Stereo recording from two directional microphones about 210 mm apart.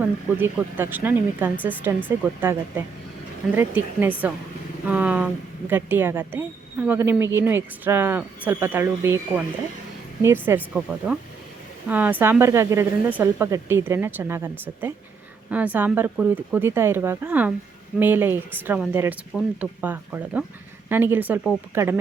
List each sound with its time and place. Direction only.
0.0 s a woman's voice: 10° right (ahead or behind)